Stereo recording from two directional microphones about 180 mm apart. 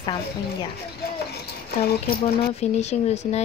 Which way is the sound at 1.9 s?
60° left (ahead or behind).